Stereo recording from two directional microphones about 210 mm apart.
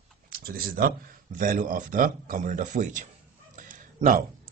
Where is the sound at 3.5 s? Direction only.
35° right (ahead or behind).